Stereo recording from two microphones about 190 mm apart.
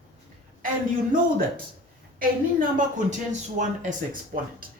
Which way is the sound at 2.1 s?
45° right (ahead or behind).